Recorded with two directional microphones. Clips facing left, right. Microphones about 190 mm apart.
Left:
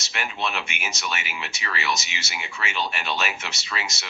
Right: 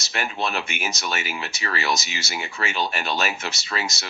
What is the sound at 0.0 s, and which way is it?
Speech, 40° right (ahead or behind).